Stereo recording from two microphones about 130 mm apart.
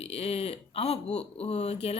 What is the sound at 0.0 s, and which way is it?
Speech, 50° left (ahead or behind).